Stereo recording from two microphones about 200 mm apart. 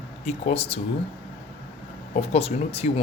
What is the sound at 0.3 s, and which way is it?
Speech, 30° left (ahead or behind).